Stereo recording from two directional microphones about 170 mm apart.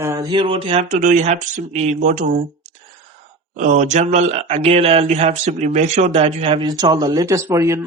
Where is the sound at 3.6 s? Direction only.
50° right (ahead or behind).